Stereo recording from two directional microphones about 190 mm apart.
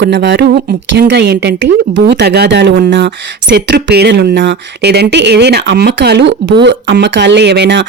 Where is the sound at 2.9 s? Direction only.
70° right (ahead or behind).